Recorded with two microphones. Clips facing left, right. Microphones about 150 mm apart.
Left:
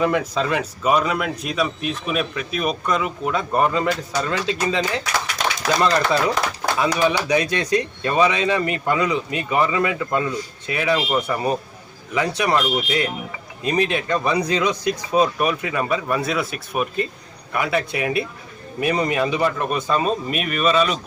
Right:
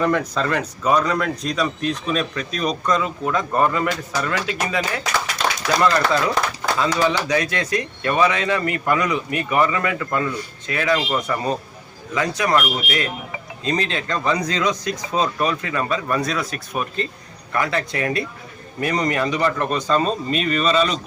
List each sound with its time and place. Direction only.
0.0 s a man's voice: 10° left (ahead or behind)
13.7 s a man's voice: 15° left (ahead or behind)